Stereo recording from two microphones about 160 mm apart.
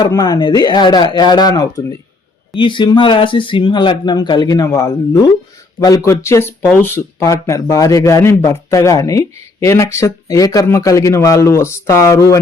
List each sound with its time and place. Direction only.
0.0 s speech: 25° left (ahead or behind)
6.1 s speech: 15° left (ahead or behind)